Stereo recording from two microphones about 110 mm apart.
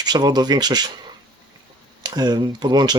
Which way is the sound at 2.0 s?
40° right (ahead or behind).